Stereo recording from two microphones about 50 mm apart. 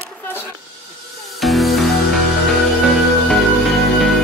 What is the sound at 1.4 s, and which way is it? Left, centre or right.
Music, centre.